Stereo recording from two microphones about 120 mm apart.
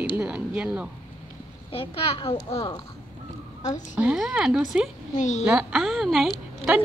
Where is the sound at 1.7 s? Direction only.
50° left (ahead or behind).